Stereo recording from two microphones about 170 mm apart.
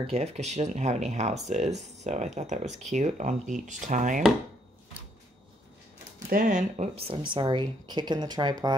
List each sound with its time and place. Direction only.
0.1 s speech: 40° right (ahead or behind)
6.1 s speech: 55° right (ahead or behind)
7.0 s speech: 30° right (ahead or behind)